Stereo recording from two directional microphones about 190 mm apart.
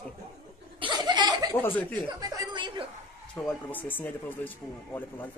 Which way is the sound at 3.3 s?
5° left (ahead or behind).